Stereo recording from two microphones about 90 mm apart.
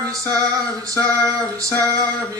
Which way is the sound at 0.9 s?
20° left (ahead or behind).